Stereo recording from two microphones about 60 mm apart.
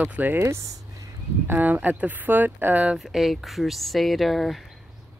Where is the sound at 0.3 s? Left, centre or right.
Right.